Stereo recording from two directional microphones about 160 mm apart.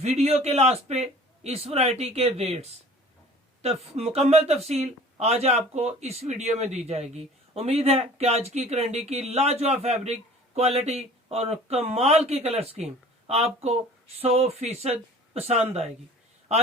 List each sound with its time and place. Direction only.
0.0 s a man's voice: 40° right (ahead or behind)